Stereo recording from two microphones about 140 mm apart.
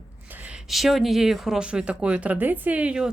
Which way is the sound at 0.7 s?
Centre (ahead or behind).